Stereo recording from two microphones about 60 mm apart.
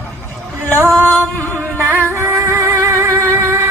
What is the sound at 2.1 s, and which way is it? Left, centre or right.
Music, right.